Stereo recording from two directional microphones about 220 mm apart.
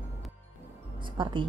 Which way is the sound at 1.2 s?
20° right (ahead or behind).